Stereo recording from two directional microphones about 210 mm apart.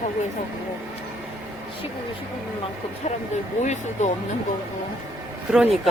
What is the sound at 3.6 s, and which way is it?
Speech, 35° left (ahead or behind).